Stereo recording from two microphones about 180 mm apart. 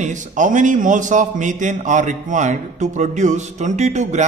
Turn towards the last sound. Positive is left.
turn(degrees=-40)  # may be behind; listen again after turning